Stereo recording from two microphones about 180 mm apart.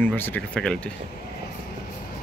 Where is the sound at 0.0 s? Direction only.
10° left (ahead or behind).